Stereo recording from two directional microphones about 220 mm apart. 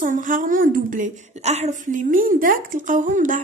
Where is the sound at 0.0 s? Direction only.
35° right (ahead or behind).